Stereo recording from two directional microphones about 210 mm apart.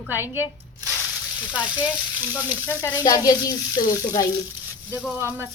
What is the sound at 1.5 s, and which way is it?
Speech, 5° right (ahead or behind).